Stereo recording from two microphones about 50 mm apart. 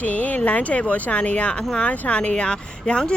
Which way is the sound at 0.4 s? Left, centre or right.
Left.